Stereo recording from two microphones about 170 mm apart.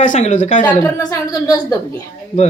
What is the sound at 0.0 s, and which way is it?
Speech, 45° left (ahead or behind).